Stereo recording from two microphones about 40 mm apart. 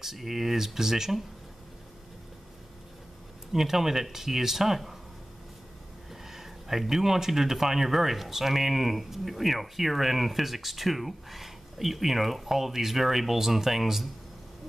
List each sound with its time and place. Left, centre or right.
0.0 s speech: centre
3.5 s speech: centre
6.2 s speech: centre